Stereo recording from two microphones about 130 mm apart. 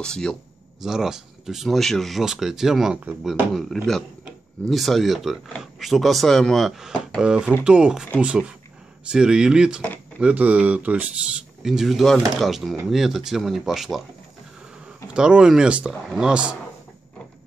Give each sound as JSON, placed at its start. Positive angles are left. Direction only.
{"t": 0.0, "sound": "speech", "side_deg": 5}
{"t": 15.1, "sound": "speech", "side_deg": -5}